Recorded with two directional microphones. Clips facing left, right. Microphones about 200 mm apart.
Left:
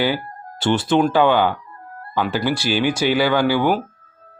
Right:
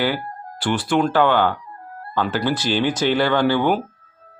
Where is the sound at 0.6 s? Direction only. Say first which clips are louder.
Left 3 dB; 25° left (ahead or behind).